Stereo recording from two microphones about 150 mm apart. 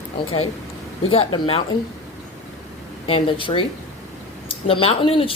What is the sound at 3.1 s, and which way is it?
A woman's voice, 35° left (ahead or behind).